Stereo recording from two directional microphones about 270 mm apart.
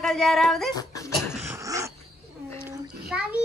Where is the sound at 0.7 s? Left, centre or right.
Centre.